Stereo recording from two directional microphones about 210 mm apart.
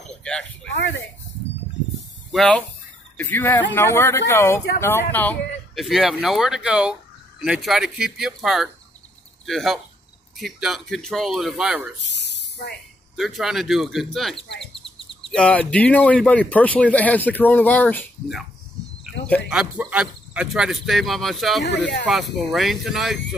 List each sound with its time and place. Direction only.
0.2 s a sound: 5° left (ahead or behind)
0.7 s speech: 60° left (ahead or behind)
2.3 s speech: 5° left (ahead or behind)
12.0 s a sound: 55° left (ahead or behind)
13.1 s speech: centre (ahead or behind)
19.5 s speech: 5° right (ahead or behind)
21.6 s speech: 55° left (ahead or behind)
22.0 s speech: centre (ahead or behind)